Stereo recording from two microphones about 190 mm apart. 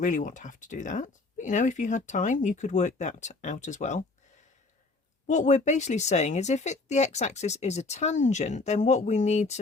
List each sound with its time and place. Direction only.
0.0 s speech: 45° left (ahead or behind)
5.2 s speech: 40° left (ahead or behind)